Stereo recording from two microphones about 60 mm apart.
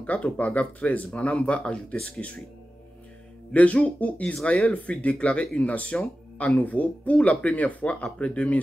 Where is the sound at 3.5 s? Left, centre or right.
Left.